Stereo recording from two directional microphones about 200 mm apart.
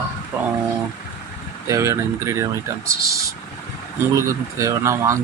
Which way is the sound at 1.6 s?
15° right (ahead or behind).